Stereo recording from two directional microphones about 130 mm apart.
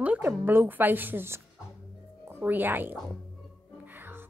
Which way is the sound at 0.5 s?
15° right (ahead or behind).